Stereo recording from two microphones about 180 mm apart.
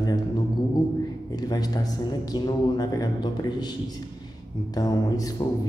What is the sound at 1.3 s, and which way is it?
Speech, 20° left (ahead or behind).